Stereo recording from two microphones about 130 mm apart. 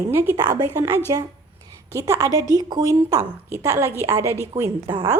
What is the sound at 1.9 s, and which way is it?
A woman's voice, 25° right (ahead or behind).